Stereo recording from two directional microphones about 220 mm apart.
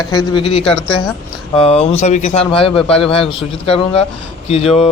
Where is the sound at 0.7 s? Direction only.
5° left (ahead or behind).